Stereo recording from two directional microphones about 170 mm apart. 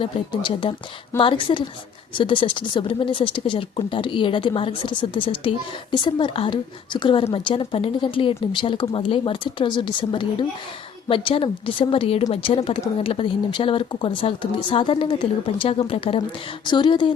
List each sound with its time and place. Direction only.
0.0 s speech: 30° left (ahead or behind)